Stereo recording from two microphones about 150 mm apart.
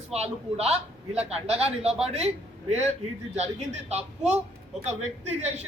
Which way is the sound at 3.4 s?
45° right (ahead or behind).